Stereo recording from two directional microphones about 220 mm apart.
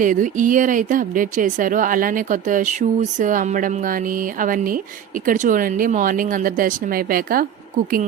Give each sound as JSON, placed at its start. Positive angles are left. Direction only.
{"t": 0.0, "sound": "a woman's voice", "side_deg": -35}